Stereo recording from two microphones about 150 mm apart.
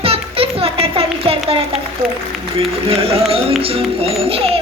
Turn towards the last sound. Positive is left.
turn(degrees=-40)  # may be behind; listen again after turning